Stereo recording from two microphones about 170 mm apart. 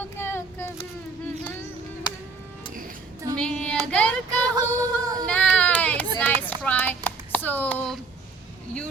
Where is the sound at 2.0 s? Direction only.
25° left (ahead or behind).